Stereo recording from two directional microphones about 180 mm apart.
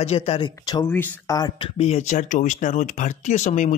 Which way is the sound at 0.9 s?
10° left (ahead or behind).